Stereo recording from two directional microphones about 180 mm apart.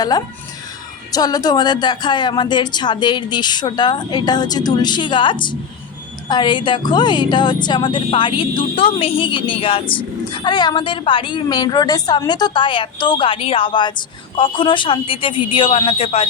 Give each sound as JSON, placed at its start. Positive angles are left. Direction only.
{"t": 1.1, "sound": "a woman's voice", "side_deg": 20}